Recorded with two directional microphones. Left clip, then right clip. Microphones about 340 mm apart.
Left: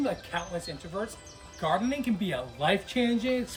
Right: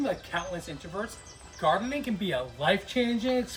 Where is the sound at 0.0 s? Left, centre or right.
Centre.